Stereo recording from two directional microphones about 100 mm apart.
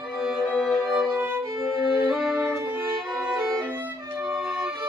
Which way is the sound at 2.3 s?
20° right (ahead or behind).